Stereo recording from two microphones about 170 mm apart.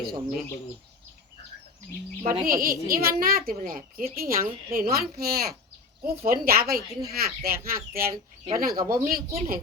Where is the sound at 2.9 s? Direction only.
60° right (ahead or behind).